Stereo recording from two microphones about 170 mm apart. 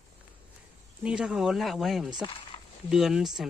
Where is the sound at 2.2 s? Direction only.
30° left (ahead or behind).